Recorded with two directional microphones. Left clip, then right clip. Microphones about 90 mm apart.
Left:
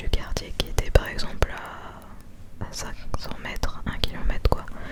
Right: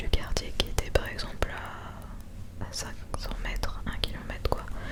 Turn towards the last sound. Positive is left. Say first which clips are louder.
# left 5 dB
turn(degrees=30)  # may be behind; listen again after turning